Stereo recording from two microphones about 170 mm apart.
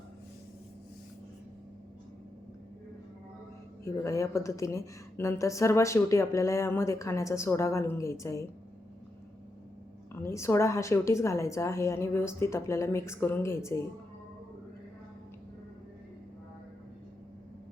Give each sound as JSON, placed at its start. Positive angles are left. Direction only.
{"t": 3.8, "sound": "a woman's voice", "side_deg": 15}
{"t": 10.2, "sound": "a woman's voice", "side_deg": 15}